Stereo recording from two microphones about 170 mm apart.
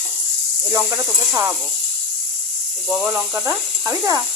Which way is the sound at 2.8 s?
5° right (ahead or behind).